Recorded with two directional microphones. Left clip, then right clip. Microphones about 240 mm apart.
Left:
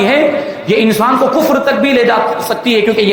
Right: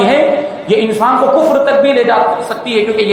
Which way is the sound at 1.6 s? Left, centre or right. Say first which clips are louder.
Right 1 dB; left.